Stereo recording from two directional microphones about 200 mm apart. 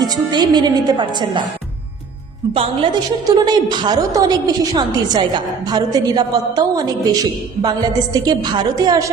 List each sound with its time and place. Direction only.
0.0 s a woman's voice: 20° right (ahead or behind)
2.5 s a woman's voice: 25° right (ahead or behind)